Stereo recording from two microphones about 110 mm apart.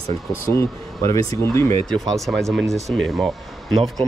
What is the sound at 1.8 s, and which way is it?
Speech, 5° left (ahead or behind).